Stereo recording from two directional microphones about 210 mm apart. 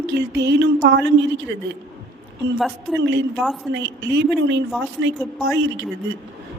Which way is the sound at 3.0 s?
60° right (ahead or behind).